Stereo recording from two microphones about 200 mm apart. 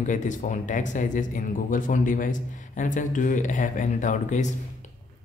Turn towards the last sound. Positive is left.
turn(degrees=35)  # may be behind; listen again after turning